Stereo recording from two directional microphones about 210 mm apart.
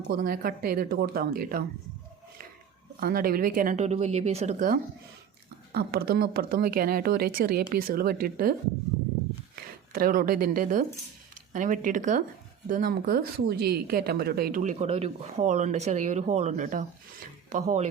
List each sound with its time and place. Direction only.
0.1 s speech: 45° right (ahead or behind)
3.0 s speech: 45° right (ahead or behind)
5.7 s speech: 50° right (ahead or behind)
9.9 s speech: 40° right (ahead or behind)